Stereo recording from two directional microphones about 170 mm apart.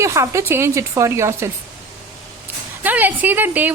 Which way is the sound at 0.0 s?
15° right (ahead or behind).